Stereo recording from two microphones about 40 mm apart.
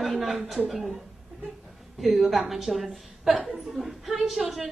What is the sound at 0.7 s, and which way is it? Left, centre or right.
Speech, centre.